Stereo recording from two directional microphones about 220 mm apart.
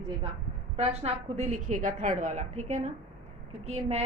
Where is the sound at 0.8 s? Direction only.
30° right (ahead or behind).